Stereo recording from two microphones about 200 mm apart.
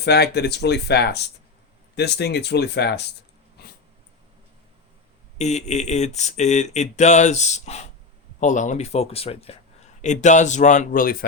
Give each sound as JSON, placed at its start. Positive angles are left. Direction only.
{"t": 0.0, "sound": "speech", "side_deg": 55}
{"t": 5.4, "sound": "speech", "side_deg": 35}